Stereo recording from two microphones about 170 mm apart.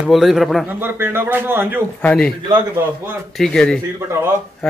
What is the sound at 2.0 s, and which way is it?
Speech, 10° left (ahead or behind).